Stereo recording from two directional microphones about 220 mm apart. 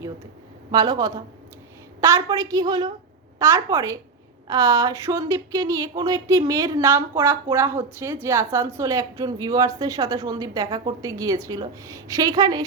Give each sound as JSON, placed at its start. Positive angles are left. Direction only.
{"t": 0.7, "sound": "speech", "side_deg": -20}